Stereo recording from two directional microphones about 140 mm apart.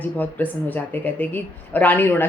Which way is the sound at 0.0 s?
10° left (ahead or behind).